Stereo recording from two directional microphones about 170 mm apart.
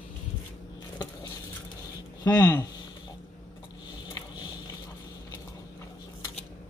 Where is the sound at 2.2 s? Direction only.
20° left (ahead or behind).